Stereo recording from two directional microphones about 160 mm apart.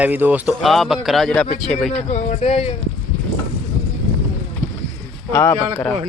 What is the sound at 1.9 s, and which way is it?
Speech, 45° left (ahead or behind).